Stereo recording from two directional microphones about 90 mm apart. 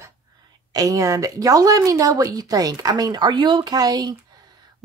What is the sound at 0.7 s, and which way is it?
A woman's voice, 40° right (ahead or behind).